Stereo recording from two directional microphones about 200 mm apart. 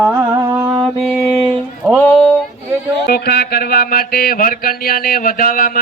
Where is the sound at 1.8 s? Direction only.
5° right (ahead or behind).